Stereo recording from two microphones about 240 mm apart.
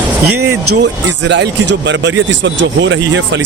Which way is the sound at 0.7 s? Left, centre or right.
Right.